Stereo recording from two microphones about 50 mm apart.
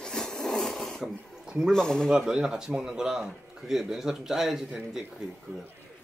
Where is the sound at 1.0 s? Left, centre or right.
Centre.